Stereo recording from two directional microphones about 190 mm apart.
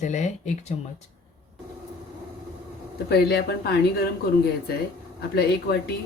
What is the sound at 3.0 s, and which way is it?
Speech, 55° left (ahead or behind).